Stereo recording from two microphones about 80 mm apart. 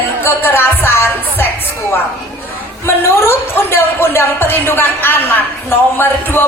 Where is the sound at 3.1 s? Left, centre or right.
Left.